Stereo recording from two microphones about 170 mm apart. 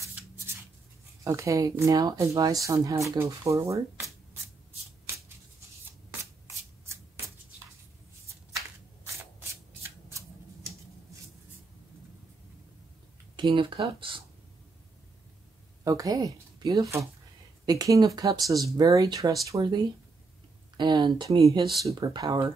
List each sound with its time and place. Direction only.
1.2 s speech: 20° right (ahead or behind)
13.4 s speech: 30° right (ahead or behind)
15.8 s a woman's voice: 20° right (ahead or behind)